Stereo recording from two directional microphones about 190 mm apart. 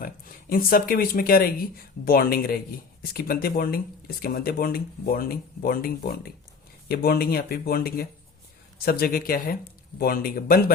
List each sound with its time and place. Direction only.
0.0 s speech: 45° left (ahead or behind)